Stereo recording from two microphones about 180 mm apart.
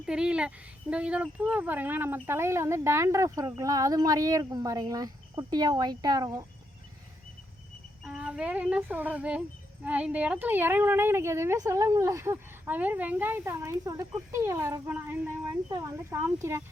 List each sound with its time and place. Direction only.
0.0 s speech: 5° right (ahead or behind); by 6.4 s 20° right (ahead or behind)
8.0 s speech: 5° right (ahead or behind)